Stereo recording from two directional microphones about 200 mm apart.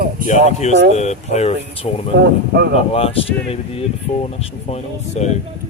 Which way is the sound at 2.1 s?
55° right (ahead or behind).